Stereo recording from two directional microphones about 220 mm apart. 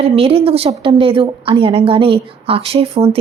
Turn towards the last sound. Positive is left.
turn(degrees=-25)  # may be behind; listen again after turning